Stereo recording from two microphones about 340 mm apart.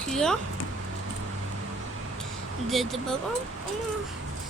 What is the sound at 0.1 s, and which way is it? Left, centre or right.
Speech, centre.